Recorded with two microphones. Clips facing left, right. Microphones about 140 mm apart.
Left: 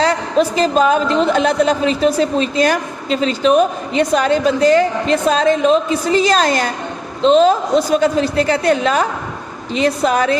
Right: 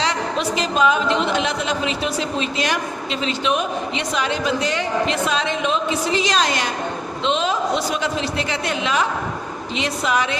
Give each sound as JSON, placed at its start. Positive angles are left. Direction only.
{"t": 0.0, "sound": "a woman's voice", "side_deg": 40}